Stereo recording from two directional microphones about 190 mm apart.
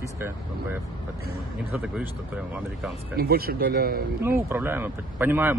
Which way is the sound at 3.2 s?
50° right (ahead or behind).